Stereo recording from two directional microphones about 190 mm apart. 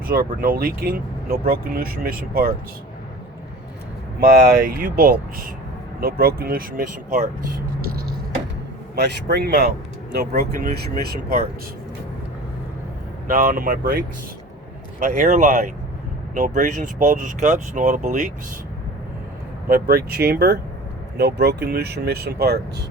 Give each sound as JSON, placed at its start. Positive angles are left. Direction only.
{"t": 0.1, "sound": "speech", "side_deg": -50}
{"t": 4.2, "sound": "speech", "side_deg": -50}
{"t": 6.0, "sound": "speech", "side_deg": -50}
{"t": 9.0, "sound": "speech", "side_deg": -60}
{"t": 13.2, "sound": "speech", "side_deg": -45}
{"t": 19.6, "sound": "speech", "side_deg": -55}